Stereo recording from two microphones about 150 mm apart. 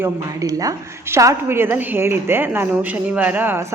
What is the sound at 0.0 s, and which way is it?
A woman's voice, 25° right (ahead or behind).